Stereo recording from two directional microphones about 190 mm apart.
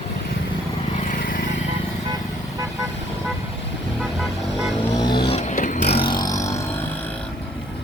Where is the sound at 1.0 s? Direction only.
45° left (ahead or behind).